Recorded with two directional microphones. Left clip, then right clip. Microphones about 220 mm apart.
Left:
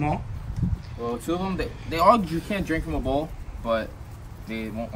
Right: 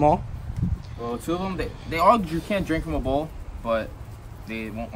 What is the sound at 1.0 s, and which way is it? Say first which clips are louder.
Speech: even; 10° right (ahead or behind).